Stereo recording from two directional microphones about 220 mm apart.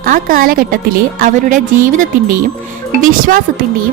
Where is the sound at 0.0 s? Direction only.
40° right (ahead or behind).